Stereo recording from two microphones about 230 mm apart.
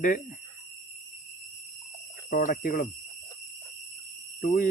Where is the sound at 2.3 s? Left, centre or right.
Left.